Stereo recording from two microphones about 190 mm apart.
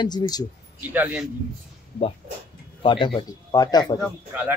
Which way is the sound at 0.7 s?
5° right (ahead or behind).